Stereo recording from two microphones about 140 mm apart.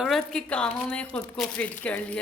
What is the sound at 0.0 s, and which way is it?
Speech, 5° left (ahead or behind).